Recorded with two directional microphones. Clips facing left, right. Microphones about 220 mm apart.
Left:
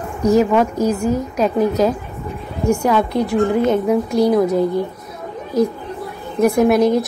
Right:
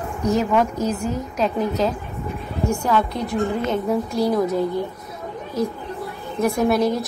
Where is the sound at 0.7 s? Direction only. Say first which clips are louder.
Left 6 dB; 45° left (ahead or behind).